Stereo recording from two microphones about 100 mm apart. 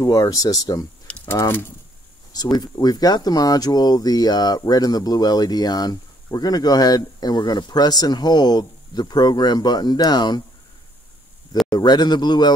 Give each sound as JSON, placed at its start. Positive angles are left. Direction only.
{"t": 0.0, "sound": "speech", "side_deg": 40}
{"t": 1.2, "sound": "speech", "side_deg": 25}
{"t": 2.3, "sound": "speech", "side_deg": 40}
{"t": 11.6, "sound": "speech", "side_deg": 40}